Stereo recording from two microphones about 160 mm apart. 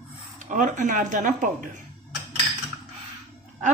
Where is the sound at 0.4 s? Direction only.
50° right (ahead or behind).